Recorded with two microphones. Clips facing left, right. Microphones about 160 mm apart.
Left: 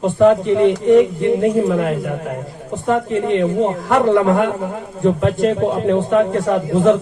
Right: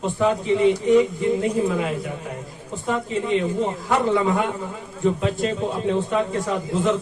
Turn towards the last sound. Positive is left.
turn(degrees=60)  # may be behind; listen again after turning